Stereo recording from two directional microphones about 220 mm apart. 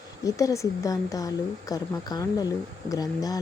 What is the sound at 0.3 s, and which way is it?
Speech, 15° left (ahead or behind).